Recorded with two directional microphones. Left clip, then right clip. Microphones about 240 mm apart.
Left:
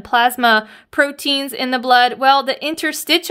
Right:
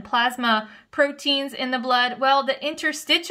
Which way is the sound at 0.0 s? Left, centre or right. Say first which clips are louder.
Left 8 dB; left.